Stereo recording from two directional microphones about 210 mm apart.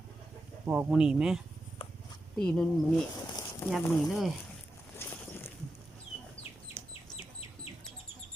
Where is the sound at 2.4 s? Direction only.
5° left (ahead or behind).